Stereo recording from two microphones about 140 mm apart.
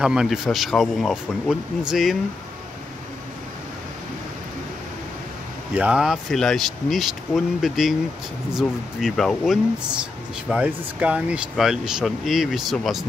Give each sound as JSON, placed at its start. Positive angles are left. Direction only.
{"t": 0.0, "sound": "speech", "side_deg": -5}
{"t": 5.8, "sound": "speech", "side_deg": -5}
{"t": 10.5, "sound": "speech", "side_deg": -10}